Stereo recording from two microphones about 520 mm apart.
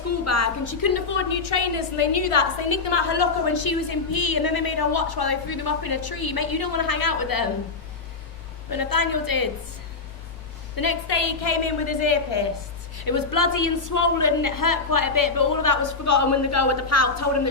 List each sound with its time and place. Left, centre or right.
0.3 s a woman's voice: left
8.7 s a woman's voice: left
10.8 s a woman's voice: left
13.0 s a woman's voice: left